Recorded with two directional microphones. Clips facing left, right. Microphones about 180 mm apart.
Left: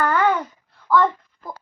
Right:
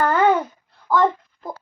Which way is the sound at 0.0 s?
25° right (ahead or behind).